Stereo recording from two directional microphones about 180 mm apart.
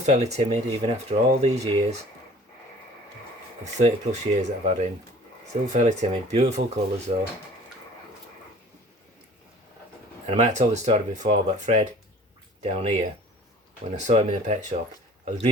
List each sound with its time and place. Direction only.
0.0 s speech: 40° right (ahead or behind)
3.6 s speech: 40° right (ahead or behind)
10.2 s speech: 40° right (ahead or behind)
13.9 s speech: 40° right (ahead or behind)